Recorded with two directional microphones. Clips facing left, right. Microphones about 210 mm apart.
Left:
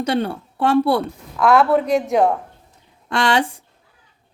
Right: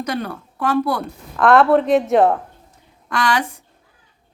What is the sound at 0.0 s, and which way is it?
A woman's voice, 30° left (ahead or behind).